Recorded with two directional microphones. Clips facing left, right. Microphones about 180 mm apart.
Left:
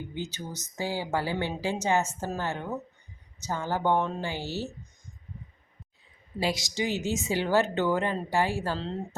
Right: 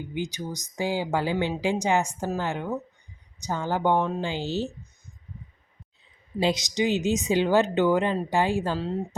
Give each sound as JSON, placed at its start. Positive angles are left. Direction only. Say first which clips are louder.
{"t": 0.1, "sound": "speech", "louder": "right 5 dB", "side_deg": -15}
{"t": 6.4, "sound": "speech", "louder": "right 5 dB", "side_deg": -20}